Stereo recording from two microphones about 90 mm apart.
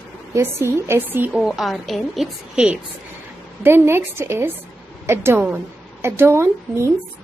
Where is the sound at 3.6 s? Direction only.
25° right (ahead or behind).